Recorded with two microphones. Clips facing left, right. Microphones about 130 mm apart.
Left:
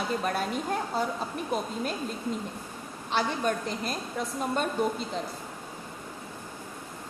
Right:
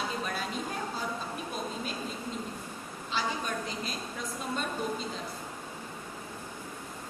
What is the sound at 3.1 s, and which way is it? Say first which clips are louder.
Speech: left 5 dB; 55° left (ahead or behind).